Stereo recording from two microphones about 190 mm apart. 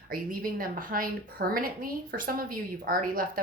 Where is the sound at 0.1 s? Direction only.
50° right (ahead or behind).